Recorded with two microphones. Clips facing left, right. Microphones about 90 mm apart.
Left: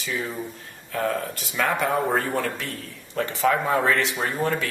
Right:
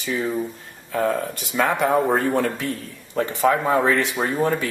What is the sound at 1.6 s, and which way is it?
Speech, 15° right (ahead or behind).